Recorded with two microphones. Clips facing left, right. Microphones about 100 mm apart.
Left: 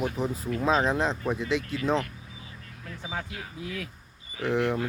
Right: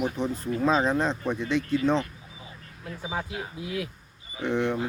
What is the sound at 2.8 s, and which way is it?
Speech, 15° right (ahead or behind).